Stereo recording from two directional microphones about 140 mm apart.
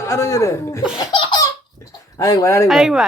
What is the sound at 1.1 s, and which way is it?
Laughter, 35° left (ahead or behind).